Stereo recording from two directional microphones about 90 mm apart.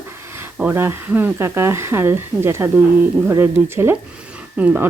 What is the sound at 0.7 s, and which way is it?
Speech, 25° right (ahead or behind).